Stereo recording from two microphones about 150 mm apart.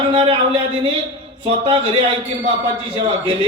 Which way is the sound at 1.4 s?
35° right (ahead or behind).